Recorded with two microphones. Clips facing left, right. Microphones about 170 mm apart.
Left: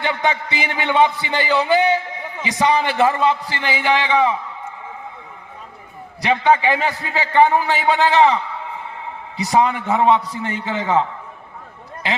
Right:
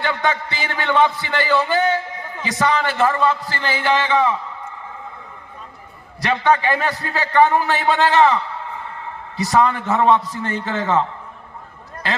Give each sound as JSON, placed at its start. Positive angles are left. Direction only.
{"t": 0.0, "sound": "a man's voice", "side_deg": 15}
{"t": 6.2, "sound": "a man's voice", "side_deg": 15}
{"t": 9.4, "sound": "a man's voice", "side_deg": 15}